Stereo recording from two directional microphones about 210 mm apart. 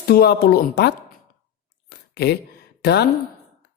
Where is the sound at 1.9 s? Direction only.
50° left (ahead or behind).